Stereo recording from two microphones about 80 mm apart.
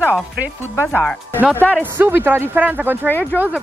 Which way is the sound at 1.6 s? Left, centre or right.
Centre.